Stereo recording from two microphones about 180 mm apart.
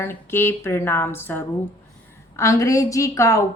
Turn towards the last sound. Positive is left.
turn(degrees=15)  # may be behind; listen again after turning